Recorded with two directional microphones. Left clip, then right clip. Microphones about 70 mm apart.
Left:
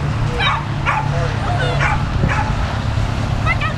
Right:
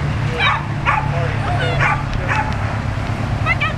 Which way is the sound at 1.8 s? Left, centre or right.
Right.